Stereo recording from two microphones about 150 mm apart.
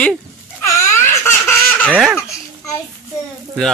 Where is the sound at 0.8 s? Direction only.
15° left (ahead or behind).